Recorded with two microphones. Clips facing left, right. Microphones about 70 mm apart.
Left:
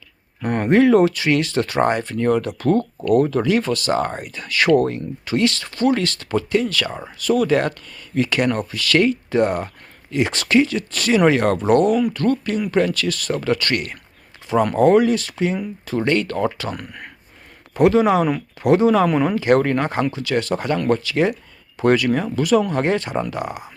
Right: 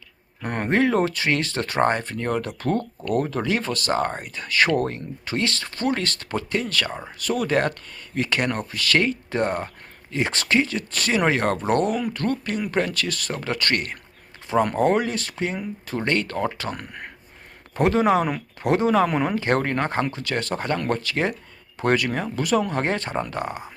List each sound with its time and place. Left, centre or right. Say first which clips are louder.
0.4 s speech: left 6 dB; right
14.5 s speech: left 5 dB; right
23.5 s speech: left 1 dB; centre